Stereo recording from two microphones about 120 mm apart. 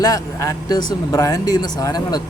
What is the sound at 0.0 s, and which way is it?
Speech, 30° left (ahead or behind).